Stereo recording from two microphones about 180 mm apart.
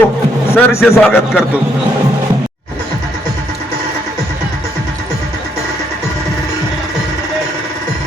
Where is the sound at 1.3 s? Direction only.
5° right (ahead or behind).